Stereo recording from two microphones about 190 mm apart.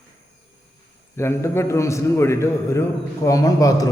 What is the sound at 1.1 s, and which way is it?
A man's voice, 15° left (ahead or behind).